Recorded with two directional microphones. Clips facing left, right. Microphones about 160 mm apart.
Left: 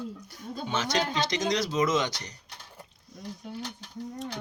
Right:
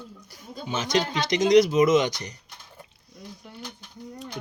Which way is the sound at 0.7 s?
15° right (ahead or behind).